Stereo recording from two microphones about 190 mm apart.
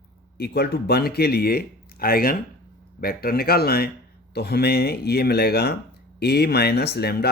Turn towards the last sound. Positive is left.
turn(degrees=55)  # may be behind; listen again after turning